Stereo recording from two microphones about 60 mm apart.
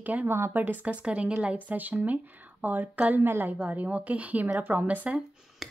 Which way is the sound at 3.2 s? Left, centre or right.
Right.